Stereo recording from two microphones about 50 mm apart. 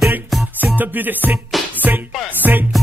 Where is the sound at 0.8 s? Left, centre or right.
Right.